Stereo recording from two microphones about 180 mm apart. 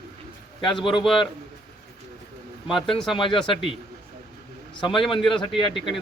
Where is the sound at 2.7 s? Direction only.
Centre (ahead or behind).